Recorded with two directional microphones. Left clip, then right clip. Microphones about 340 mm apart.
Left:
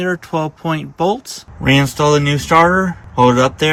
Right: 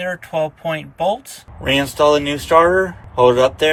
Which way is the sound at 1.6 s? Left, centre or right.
Centre.